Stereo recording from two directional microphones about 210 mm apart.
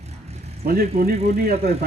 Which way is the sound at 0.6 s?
45° right (ahead or behind).